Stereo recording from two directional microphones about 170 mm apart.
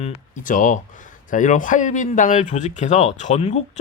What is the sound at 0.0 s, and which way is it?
Speech, 50° left (ahead or behind).